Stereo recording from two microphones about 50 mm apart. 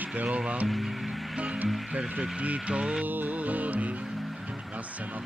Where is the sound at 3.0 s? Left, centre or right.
Right.